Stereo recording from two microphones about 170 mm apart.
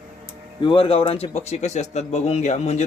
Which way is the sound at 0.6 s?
30° left (ahead or behind).